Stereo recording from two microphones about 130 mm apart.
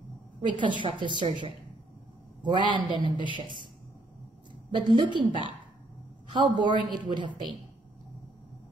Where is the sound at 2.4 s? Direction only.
35° right (ahead or behind).